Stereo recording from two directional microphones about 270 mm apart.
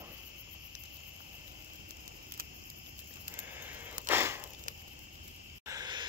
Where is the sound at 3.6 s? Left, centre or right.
Centre.